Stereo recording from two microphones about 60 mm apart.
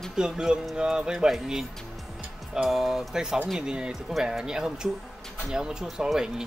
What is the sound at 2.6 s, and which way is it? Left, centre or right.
Speech, centre.